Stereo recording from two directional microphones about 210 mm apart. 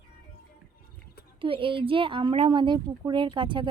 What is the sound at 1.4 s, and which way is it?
Speech, 25° right (ahead or behind).